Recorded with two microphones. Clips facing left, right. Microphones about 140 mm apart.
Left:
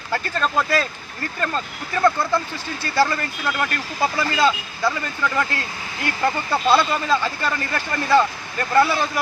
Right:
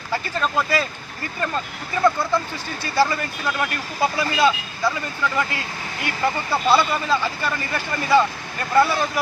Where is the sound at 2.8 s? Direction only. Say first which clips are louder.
Even; 10° right (ahead or behind).